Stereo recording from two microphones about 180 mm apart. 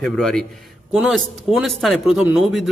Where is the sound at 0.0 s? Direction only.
5° left (ahead or behind).